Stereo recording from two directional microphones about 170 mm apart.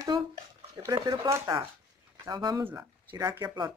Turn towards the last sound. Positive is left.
turn(degrees=-25)  # may be behind; listen again after turning